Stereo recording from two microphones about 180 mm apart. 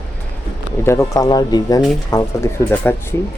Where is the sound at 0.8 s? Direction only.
15° left (ahead or behind).